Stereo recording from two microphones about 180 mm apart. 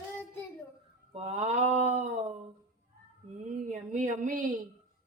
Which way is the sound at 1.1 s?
35° right (ahead or behind).